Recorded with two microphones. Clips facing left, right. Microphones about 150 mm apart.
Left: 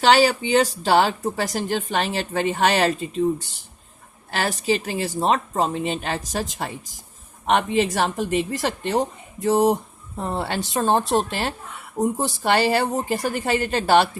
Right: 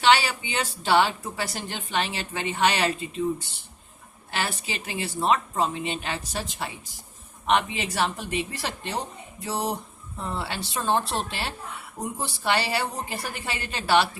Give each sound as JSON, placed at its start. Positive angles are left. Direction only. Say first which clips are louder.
{"t": 0.0, "sound": "speech", "louder": "left 5 dB", "side_deg": 40}
{"t": 4.3, "sound": "speech", "louder": "left 8 dB", "side_deg": 40}